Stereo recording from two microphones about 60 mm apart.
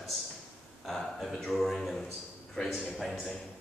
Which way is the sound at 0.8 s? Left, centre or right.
Centre.